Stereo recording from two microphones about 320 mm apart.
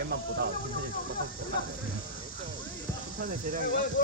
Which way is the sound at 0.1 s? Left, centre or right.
Right.